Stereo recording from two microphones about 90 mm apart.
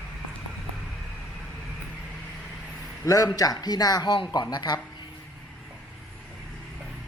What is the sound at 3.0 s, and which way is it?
A man's voice, 40° left (ahead or behind).